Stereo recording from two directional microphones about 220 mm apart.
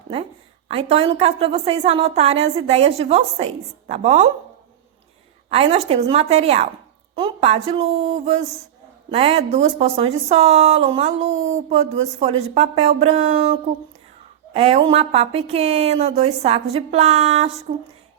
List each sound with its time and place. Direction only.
0.7 s speech: 25° right (ahead or behind)
5.5 s speech: 30° right (ahead or behind)